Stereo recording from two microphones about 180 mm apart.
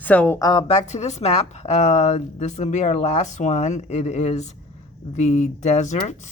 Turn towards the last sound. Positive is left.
turn(degrees=40)  # may be behind; listen again after turning